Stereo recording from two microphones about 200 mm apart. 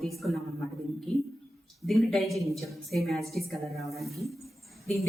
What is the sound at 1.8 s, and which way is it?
A woman's voice, centre (ahead or behind).